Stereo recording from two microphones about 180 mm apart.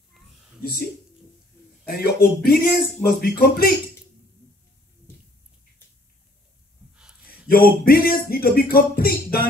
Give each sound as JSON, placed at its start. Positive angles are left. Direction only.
{"t": 0.2, "sound": "a sound", "side_deg": 0}
{"t": 1.9, "sound": "music", "side_deg": 55}
{"t": 7.5, "sound": "music", "side_deg": 55}